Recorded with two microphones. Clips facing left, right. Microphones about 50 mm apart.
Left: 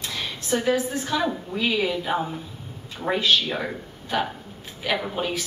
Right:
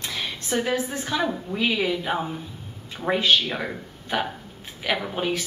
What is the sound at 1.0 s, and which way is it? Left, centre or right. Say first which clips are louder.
Speech: left 1 dB; centre.